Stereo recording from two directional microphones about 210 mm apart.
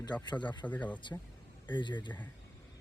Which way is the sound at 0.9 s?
20° left (ahead or behind).